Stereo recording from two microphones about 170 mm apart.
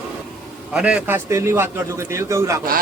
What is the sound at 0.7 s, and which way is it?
A man's voice, 5° right (ahead or behind).